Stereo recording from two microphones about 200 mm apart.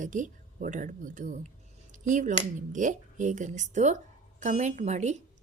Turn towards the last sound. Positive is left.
turn(degrees=-35)  # may be behind; listen again after turning